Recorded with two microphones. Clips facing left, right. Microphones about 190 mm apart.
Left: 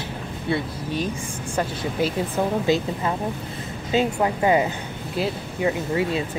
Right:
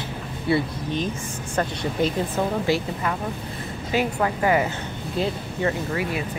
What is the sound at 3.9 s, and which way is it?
Speech, 20° left (ahead or behind).